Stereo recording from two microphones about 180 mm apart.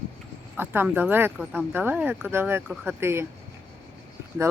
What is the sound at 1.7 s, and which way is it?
Speech, 10° right (ahead or behind).